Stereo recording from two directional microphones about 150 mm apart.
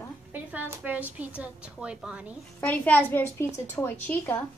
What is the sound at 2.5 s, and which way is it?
Speech, 10° left (ahead or behind).